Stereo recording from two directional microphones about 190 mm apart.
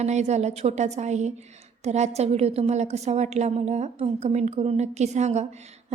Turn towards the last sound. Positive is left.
turn(degrees=-35)  # may be behind; listen again after turning